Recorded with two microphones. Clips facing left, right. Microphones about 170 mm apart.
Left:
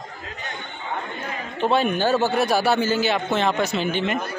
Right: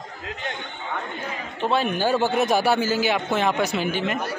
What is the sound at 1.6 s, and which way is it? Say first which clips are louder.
Speech: left 3 dB; centre (ahead or behind).